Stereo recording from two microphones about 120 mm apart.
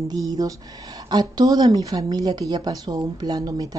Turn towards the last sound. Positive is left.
turn(degrees=-30)  # may be behind; listen again after turning